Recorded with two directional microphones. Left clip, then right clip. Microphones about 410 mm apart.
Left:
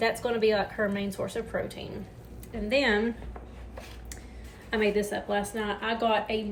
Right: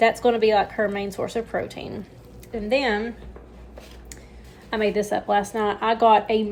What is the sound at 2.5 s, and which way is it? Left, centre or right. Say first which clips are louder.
Speech: right 3 dB; centre.